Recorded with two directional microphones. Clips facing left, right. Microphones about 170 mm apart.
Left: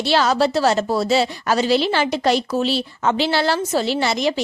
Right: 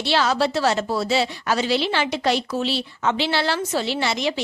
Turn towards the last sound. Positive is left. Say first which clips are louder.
# left 4 dB
turn(degrees=40)  # may be behind; listen again after turning